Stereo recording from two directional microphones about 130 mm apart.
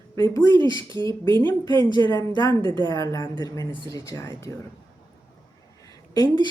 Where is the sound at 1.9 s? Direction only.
35° left (ahead or behind).